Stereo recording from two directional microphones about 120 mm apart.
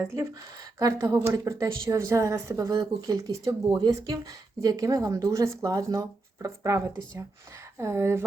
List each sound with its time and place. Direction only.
0.1 s a woman's voice: 25° right (ahead or behind)